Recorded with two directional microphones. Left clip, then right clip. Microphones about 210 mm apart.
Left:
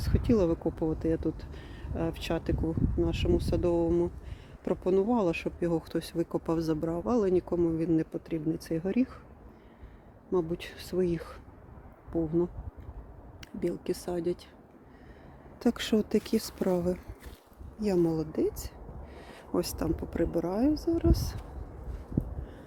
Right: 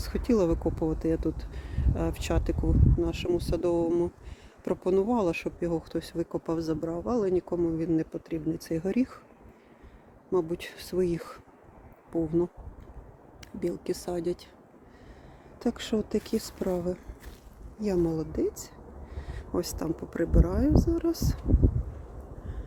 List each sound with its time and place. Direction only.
0.0 s speech: centre (ahead or behind)
10.3 s speech: 5° right (ahead or behind)
13.6 s speech: centre (ahead or behind)
15.5 s speech: 15° left (ahead or behind)
17.7 s speech: 5° left (ahead or behind)